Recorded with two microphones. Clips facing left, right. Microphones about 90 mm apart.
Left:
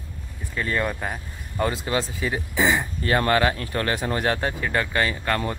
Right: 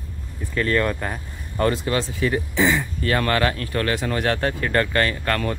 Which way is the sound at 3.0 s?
25° left (ahead or behind).